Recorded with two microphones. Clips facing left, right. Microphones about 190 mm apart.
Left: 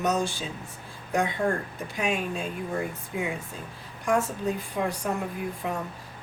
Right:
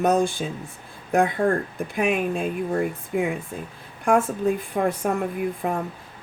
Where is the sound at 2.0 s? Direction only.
55° right (ahead or behind).